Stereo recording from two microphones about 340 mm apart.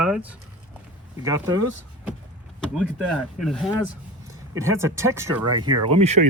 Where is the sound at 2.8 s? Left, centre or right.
Centre.